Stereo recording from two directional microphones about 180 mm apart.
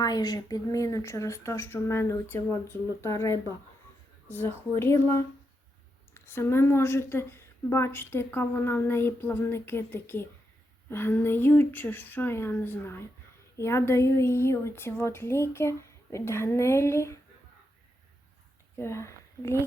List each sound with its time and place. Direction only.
0.0 s a woman's voice: 20° left (ahead or behind)
6.1 s a woman's voice: 15° left (ahead or behind)
18.8 s speech: 15° left (ahead or behind)